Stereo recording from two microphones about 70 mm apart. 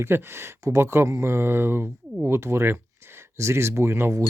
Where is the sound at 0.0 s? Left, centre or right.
Right.